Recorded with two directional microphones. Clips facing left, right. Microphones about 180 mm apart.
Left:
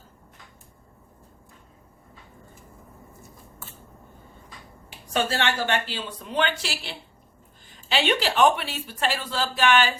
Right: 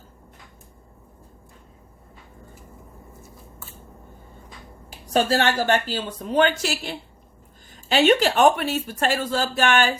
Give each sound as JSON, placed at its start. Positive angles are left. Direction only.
{"t": 4.9, "sound": "speech", "side_deg": -40}